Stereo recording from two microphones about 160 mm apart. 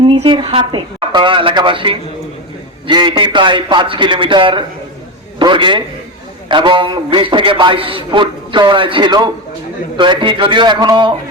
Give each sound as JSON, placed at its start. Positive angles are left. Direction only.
{"t": 0.0, "sound": "a man's voice", "side_deg": -30}